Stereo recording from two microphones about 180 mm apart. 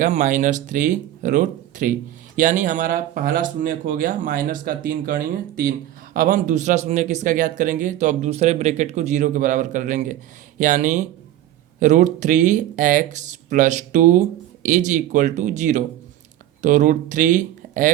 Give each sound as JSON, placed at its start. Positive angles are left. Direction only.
{"t": 0.0, "sound": "speech", "side_deg": -45}